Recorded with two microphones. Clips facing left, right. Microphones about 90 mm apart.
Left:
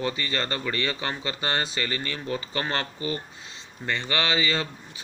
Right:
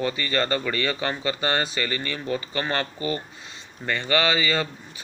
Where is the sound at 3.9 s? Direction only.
20° left (ahead or behind).